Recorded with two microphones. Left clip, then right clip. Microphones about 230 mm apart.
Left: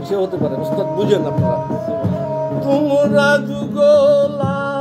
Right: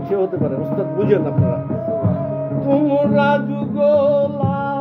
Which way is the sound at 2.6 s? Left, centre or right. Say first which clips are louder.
Left 1 dB; left.